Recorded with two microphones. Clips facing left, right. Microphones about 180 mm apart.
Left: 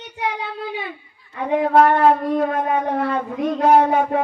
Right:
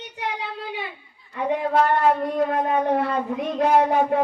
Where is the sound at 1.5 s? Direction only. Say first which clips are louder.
Left 6 dB; 55° left (ahead or behind).